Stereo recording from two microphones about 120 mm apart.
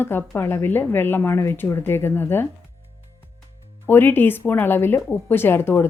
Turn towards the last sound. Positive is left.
turn(degrees=20)  # may be behind; listen again after turning